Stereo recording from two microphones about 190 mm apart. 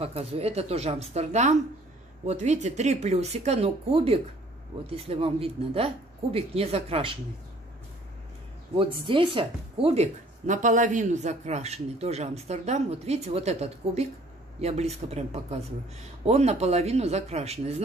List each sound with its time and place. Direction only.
0.0 s speech: 30° right (ahead or behind)
8.7 s speech: 25° right (ahead or behind)